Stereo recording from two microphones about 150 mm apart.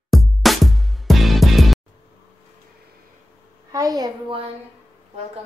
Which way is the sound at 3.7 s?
25° right (ahead or behind).